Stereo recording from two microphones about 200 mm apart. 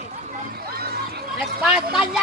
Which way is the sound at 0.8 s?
50° right (ahead or behind).